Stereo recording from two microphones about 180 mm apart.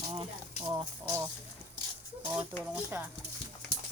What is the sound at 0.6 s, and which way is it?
Speech, 20° right (ahead or behind).